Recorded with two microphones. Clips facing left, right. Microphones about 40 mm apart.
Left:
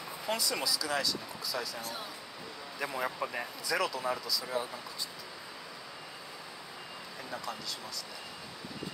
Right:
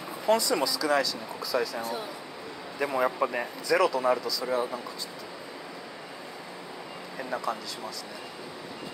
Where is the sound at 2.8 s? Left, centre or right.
Centre.